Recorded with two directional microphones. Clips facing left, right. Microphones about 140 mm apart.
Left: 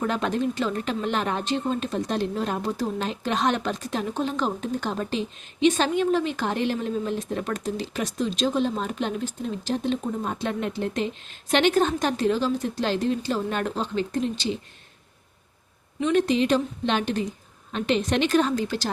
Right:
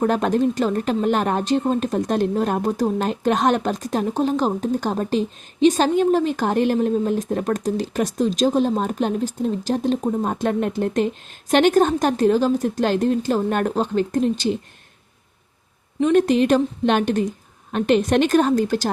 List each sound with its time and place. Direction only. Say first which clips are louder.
0.0 s speech: right 6 dB; 45° right (ahead or behind)
16.0 s speech: right 5 dB; 45° right (ahead or behind)